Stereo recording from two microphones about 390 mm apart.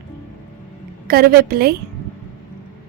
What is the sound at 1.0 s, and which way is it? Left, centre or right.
Speech, right.